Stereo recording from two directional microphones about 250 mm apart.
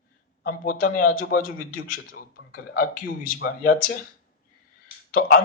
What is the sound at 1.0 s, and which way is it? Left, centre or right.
Speech, left.